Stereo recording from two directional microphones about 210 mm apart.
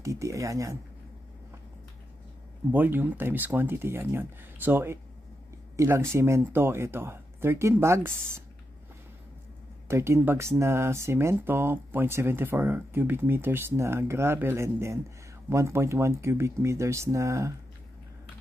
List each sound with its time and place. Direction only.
0.0 s speech: 15° right (ahead or behind)
2.7 s speech: 10° right (ahead or behind)
9.8 s speech: 10° right (ahead or behind)